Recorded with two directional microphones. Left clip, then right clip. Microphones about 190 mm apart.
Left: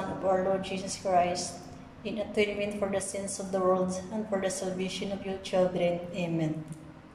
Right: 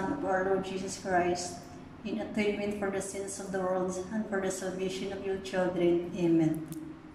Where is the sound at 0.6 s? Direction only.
15° left (ahead or behind).